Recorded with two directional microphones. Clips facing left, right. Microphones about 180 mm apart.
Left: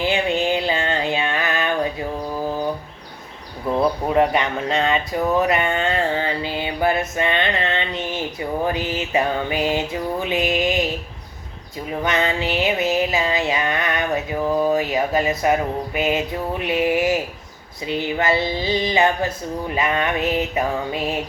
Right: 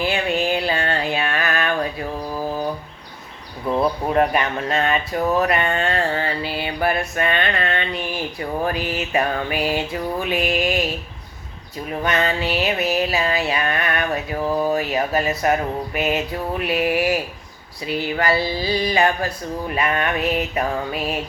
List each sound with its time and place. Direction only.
0.0 s a sound: 20° left (ahead or behind)
4.1 s mantra: 20° left (ahead or behind)
12.0 s mantra: 15° left (ahead or behind)